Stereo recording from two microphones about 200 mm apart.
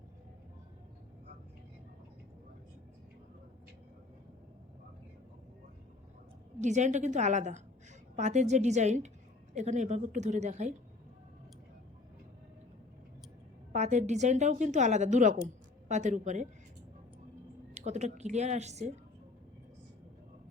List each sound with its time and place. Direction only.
6.6 s a woman's voice: 35° right (ahead or behind)
13.7 s a woman's voice: 35° right (ahead or behind)
17.7 s a woman's voice: 35° right (ahead or behind)